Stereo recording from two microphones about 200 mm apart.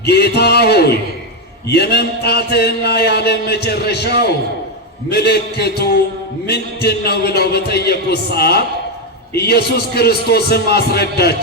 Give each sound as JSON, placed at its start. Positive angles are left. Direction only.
{"t": 0.0, "sound": "speech", "side_deg": 55}